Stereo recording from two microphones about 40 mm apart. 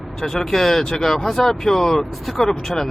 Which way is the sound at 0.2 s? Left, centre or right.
Centre.